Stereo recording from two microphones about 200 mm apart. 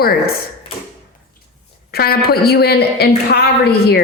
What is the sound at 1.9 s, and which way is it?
A woman's voice, 50° left (ahead or behind).